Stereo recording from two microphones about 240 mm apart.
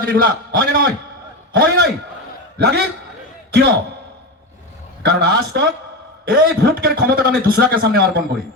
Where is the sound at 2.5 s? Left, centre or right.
Right.